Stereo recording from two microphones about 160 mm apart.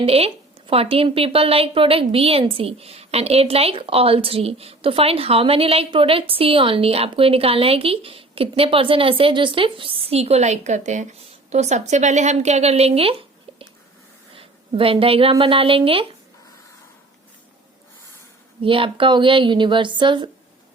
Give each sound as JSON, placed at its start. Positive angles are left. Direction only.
{"t": 0.0, "sound": "a woman's voice", "side_deg": -40}
{"t": 18.6, "sound": "a woman's voice", "side_deg": -35}